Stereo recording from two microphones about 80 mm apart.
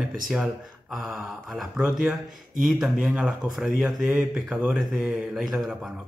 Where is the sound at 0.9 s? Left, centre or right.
Centre.